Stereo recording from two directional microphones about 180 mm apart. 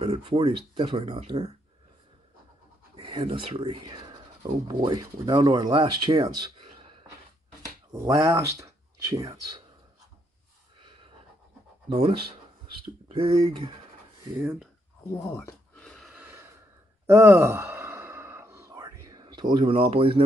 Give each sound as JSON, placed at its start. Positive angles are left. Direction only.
{"t": 0.0, "sound": "speech", "side_deg": -30}
{"t": 3.0, "sound": "speech", "side_deg": -30}
{"t": 7.9, "sound": "speech", "side_deg": -15}
{"t": 11.9, "sound": "speech", "side_deg": -30}
{"t": 15.0, "sound": "speech", "side_deg": 15}
{"t": 15.8, "sound": "a sound", "side_deg": 5}
{"t": 16.2, "sound": "gasp", "side_deg": -10}
{"t": 17.0, "sound": "sigh", "side_deg": -15}
{"t": 19.5, "sound": "speech", "side_deg": -30}